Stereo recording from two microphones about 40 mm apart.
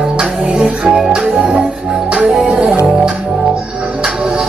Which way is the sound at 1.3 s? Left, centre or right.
Right.